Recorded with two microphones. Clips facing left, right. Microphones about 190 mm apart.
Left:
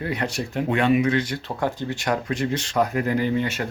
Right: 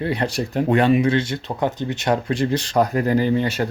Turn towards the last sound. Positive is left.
turn(degrees=-35)  # may be behind; listen again after turning